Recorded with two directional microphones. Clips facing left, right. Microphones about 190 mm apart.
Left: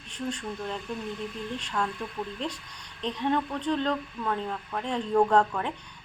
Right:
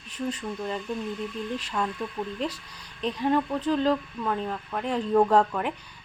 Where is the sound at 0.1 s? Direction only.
5° right (ahead or behind).